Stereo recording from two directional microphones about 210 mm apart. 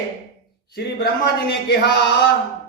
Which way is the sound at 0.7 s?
50° left (ahead or behind).